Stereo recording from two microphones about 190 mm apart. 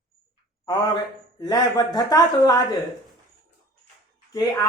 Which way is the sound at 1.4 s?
20° left (ahead or behind).